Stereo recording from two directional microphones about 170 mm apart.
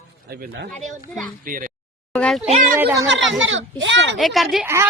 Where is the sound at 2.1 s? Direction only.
5° left (ahead or behind).